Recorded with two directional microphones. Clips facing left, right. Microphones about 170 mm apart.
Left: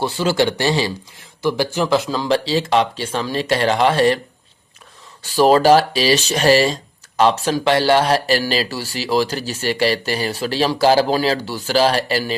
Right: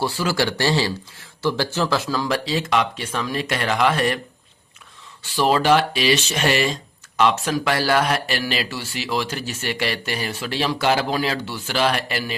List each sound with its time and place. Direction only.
0.0 s speech: 25° left (ahead or behind)
5.2 s speech: 40° left (ahead or behind)